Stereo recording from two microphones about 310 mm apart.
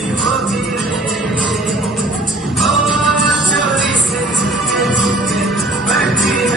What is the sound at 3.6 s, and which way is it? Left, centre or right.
Music, right.